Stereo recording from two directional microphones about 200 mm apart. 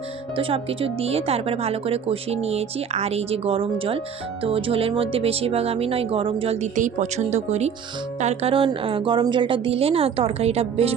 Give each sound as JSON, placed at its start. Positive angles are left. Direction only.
{"t": 0.3, "sound": "speech", "side_deg": -25}